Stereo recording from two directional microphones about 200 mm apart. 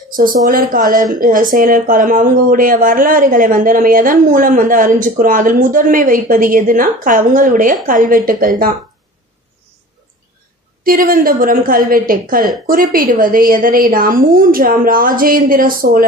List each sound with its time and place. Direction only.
0.1 s speech: 45° right (ahead or behind)
10.8 s speech: 45° right (ahead or behind)